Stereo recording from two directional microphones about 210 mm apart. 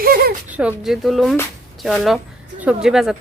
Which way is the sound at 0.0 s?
45° right (ahead or behind).